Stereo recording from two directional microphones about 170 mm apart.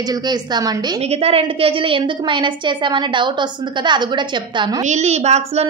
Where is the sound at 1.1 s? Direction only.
35° right (ahead or behind).